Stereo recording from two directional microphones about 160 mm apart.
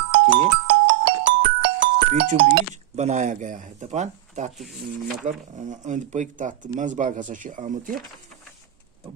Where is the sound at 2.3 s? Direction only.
50° right (ahead or behind).